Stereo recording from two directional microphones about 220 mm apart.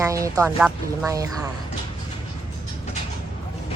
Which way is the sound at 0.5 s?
Centre (ahead or behind).